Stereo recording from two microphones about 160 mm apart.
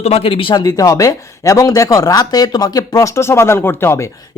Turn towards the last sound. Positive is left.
turn(degrees=15)  # may be behind; listen again after turning